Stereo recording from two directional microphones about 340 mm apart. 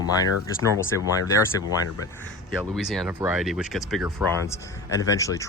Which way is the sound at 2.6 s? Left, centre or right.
Centre.